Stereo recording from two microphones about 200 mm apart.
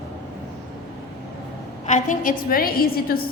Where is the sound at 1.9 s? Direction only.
40° left (ahead or behind).